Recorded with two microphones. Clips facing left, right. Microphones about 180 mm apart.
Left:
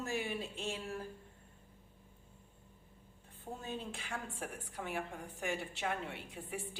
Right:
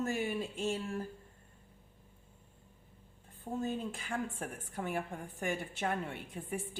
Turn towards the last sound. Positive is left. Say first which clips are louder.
# right 4 dB
turn(degrees=-50)  # may be behind; listen again after turning